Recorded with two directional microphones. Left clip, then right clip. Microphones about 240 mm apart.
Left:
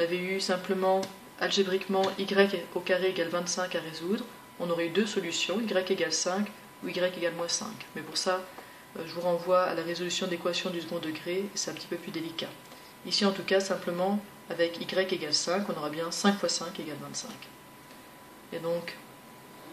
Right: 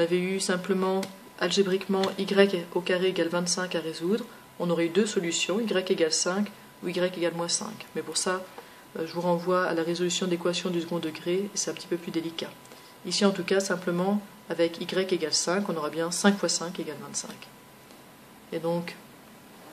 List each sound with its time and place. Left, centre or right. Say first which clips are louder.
0.0 s speech: right 3 dB; right
18.5 s speech: right 4 dB; right